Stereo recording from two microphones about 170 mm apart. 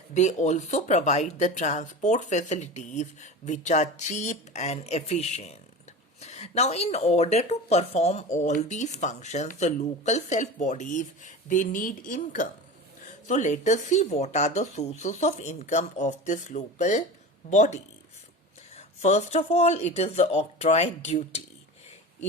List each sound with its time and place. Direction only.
0.1 s speech: 45° left (ahead or behind)
19.0 s speech: 40° left (ahead or behind)